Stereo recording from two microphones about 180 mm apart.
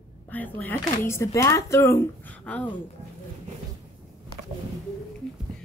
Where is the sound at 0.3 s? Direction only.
10° left (ahead or behind).